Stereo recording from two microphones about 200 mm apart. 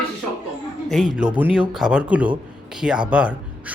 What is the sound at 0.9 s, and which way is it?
Speech, centre (ahead or behind).